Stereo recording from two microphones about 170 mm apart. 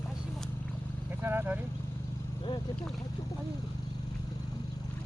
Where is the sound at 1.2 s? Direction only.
10° right (ahead or behind).